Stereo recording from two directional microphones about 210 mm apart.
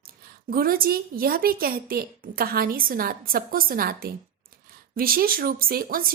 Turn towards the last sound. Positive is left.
turn(degrees=-45)  # may be behind; listen again after turning